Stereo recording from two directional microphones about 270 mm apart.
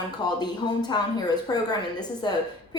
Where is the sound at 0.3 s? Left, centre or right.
Centre.